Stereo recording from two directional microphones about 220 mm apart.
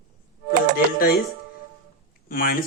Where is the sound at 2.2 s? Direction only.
40° left (ahead or behind).